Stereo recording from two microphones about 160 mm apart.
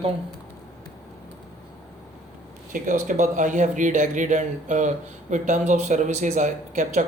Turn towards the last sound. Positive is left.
turn(degrees=-50)  # may be behind; listen again after turning